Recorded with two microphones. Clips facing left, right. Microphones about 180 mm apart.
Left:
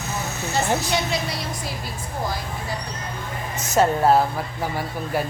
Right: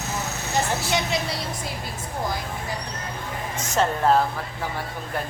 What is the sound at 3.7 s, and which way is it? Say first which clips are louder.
Speech: left 3 dB; 10° left (ahead or behind).